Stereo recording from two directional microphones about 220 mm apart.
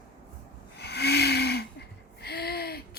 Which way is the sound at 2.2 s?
45° left (ahead or behind).